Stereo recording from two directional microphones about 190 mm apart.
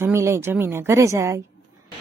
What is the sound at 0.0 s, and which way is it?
A woman's voice, 15° right (ahead or behind).